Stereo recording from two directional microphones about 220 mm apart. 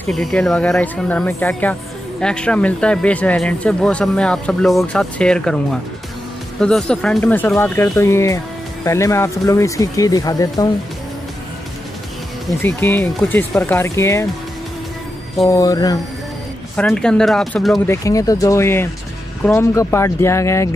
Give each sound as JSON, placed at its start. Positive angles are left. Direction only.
{"t": 0.0, "sound": "speech", "side_deg": 5}
{"t": 12.8, "sound": "speech", "side_deg": 10}
{"t": 15.4, "sound": "speech", "side_deg": 15}
{"t": 16.7, "sound": "speech", "side_deg": 5}
{"t": 17.8, "sound": "speech", "side_deg": 15}